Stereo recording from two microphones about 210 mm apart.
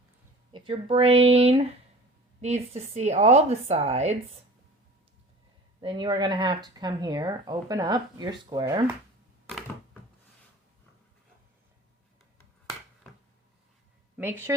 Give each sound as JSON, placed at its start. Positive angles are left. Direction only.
{"t": 0.5, "sound": "speech", "side_deg": -25}
{"t": 5.8, "sound": "speech", "side_deg": -20}
{"t": 9.5, "sound": "a sound", "side_deg": 0}
{"t": 14.2, "sound": "speech", "side_deg": -10}